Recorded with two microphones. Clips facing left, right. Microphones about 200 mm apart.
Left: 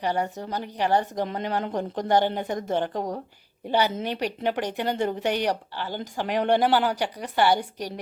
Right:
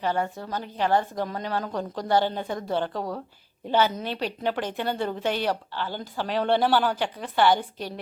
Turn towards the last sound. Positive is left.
turn(degrees=10)  # may be behind; listen again after turning